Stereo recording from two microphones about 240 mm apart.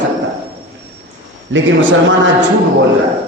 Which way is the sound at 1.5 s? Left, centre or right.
Right.